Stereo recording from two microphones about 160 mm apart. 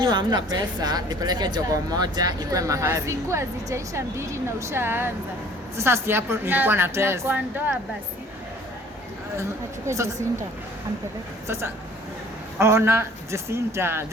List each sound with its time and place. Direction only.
0.0 s a woman's voice: 25° right (ahead or behind); by 7.8 s 10° right (ahead or behind)
9.4 s a woman's voice: 20° right (ahead or behind)
11.4 s a woman's voice: 15° right (ahead or behind)